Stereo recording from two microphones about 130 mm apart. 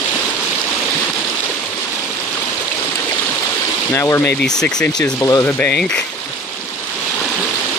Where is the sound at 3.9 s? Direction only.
20° left (ahead or behind).